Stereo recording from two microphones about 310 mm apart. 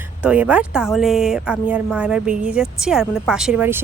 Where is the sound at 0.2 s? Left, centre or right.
Centre.